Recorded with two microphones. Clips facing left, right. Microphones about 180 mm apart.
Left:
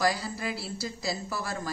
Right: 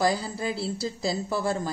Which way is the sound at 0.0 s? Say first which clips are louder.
Right 3 dB; 30° right (ahead or behind).